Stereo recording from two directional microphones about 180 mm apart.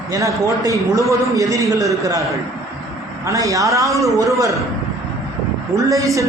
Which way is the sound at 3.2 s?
20° right (ahead or behind).